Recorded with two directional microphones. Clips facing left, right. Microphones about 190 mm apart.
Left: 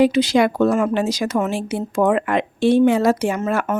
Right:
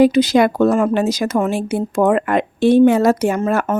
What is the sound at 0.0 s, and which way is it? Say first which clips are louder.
A woman's voice: right 3 dB; 40° right (ahead or behind).